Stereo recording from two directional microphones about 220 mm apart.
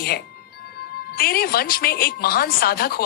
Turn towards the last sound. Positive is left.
turn(degrees=45)  # may be behind; listen again after turning